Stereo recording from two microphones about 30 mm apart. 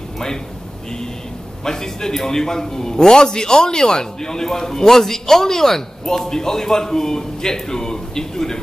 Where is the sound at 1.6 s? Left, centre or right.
Centre.